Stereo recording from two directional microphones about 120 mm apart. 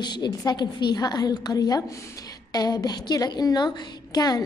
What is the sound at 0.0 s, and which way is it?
A woman's voice, 35° left (ahead or behind).